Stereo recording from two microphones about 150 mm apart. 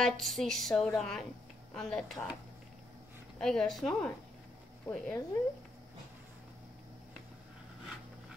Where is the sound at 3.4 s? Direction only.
5° left (ahead or behind).